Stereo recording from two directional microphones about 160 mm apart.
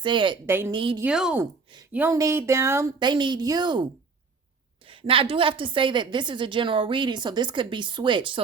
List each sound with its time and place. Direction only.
0.0 s a woman's voice: 30° right (ahead or behind)
0.4 s a woman's voice: 15° right (ahead or behind)
0.7 s a woman's voice: 30° right (ahead or behind)
1.0 s a woman's voice: 5° right (ahead or behind)
3.0 s a woman's voice: 30° right (ahead or behind)
4.9 s a woman's voice: 35° right (ahead or behind)